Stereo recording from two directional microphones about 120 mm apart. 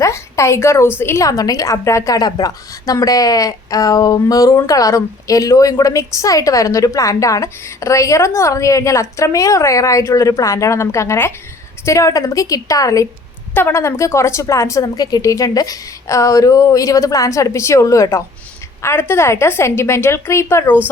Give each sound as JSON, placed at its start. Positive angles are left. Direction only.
{"t": 0.0, "sound": "a woman's voice", "side_deg": 25}